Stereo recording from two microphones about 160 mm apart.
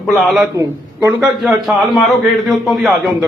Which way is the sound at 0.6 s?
15° right (ahead or behind).